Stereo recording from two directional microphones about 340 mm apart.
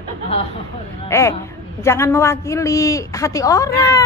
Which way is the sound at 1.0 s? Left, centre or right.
Centre.